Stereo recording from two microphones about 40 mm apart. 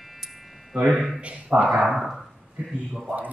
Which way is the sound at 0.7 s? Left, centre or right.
Right.